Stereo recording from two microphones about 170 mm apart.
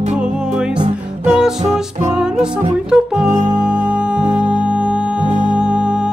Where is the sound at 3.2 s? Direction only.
45° right (ahead or behind).